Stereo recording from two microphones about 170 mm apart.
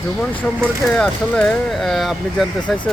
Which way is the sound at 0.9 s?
5° left (ahead or behind).